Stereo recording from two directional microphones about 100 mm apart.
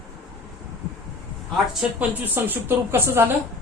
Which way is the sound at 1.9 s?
20° right (ahead or behind).